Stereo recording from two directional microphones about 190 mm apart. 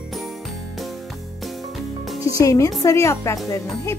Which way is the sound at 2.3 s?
15° left (ahead or behind).